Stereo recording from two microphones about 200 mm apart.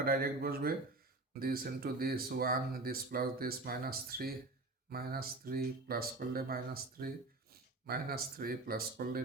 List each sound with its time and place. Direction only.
0.0 s speech: 45° right (ahead or behind)